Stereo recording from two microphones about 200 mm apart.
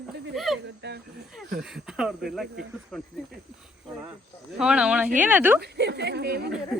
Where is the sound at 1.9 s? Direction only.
Centre (ahead or behind).